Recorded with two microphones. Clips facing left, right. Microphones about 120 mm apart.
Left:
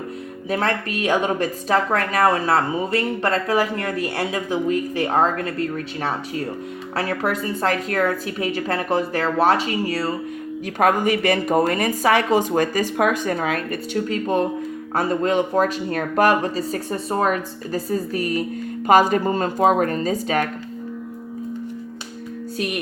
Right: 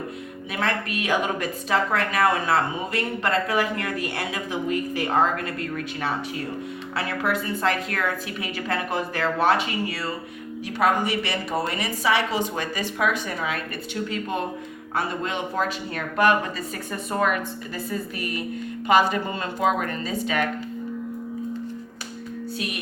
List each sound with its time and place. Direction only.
0.5 s a woman's voice: 35° left (ahead or behind)
10.8 s a woman's voice: 45° left (ahead or behind)
22.5 s music: 45° left (ahead or behind)